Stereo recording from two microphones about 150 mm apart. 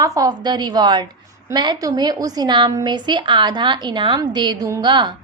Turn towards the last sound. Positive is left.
turn(degrees=-30)  # may be behind; listen again after turning